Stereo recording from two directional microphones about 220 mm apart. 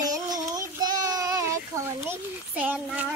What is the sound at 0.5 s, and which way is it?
Child singing, 15° right (ahead or behind).